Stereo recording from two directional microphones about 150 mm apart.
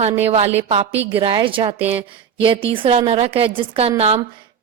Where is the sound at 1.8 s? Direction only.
10° right (ahead or behind).